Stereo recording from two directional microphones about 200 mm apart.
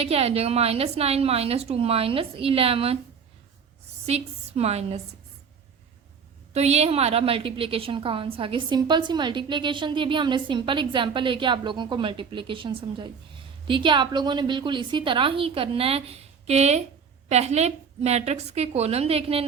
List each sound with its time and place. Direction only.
0.0 s a woman's voice: 30° right (ahead or behind)
4.0 s a woman's voice: 30° right (ahead or behind)
6.5 s a woman's voice: 30° right (ahead or behind)